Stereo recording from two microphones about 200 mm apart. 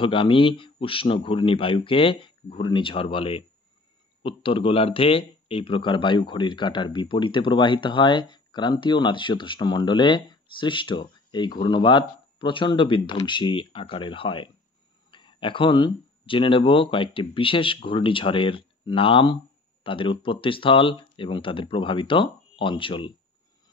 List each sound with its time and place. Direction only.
0.0 s speech: 25° left (ahead or behind)